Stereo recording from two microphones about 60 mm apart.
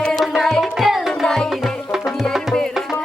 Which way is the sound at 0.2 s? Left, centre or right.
Centre.